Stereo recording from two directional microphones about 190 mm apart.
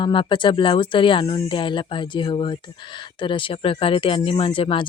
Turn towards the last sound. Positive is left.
turn(degrees=25)  # may be behind; listen again after turning